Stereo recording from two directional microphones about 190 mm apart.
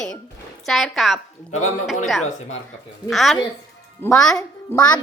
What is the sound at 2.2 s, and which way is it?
Speech, 35° left (ahead or behind).